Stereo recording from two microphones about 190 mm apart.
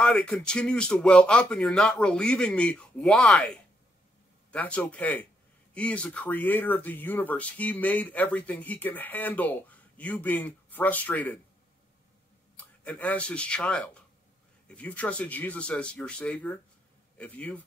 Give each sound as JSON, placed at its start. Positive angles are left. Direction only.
{"t": 0.0, "sound": "speech", "side_deg": 5}
{"t": 12.5, "sound": "speech", "side_deg": 5}